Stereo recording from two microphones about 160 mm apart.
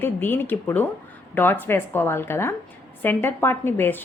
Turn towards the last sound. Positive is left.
turn(degrees=15)  # may be behind; listen again after turning